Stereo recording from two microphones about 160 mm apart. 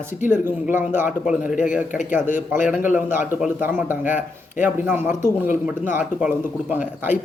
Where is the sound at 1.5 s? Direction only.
50° left (ahead or behind).